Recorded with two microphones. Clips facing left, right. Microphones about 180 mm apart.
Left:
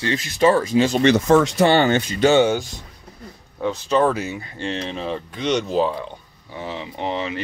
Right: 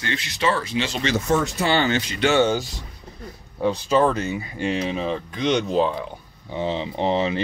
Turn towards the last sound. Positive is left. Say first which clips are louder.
# right 4 dB
turn(degrees=-30)  # may be behind; listen again after turning